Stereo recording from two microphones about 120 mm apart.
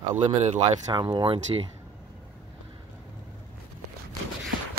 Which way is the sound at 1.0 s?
45° right (ahead or behind).